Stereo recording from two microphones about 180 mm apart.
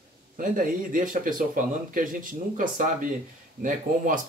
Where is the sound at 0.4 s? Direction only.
50° right (ahead or behind).